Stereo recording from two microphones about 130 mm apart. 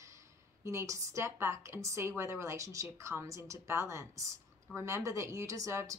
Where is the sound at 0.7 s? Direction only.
25° right (ahead or behind).